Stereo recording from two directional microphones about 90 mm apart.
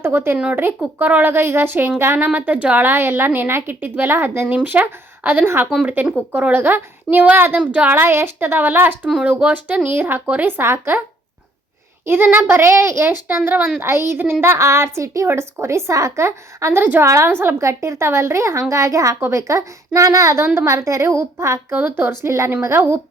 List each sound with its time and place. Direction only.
0.0 s a woman's voice: 25° right (ahead or behind)
12.0 s a woman's voice: 25° right (ahead or behind)
16.8 s a woman's voice: 20° right (ahead or behind)
17.1 s a woman's voice: 35° right (ahead or behind)